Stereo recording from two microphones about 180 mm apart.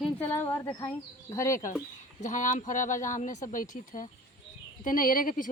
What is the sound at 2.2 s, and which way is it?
Speech, 45° left (ahead or behind).